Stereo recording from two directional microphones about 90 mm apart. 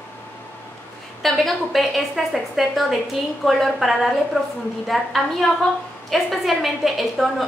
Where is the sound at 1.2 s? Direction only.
Centre (ahead or behind).